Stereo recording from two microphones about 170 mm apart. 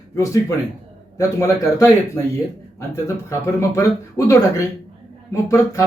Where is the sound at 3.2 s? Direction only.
15° left (ahead or behind).